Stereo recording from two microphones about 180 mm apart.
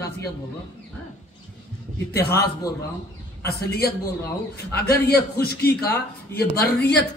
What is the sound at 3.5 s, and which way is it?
A man's voice, 60° left (ahead or behind).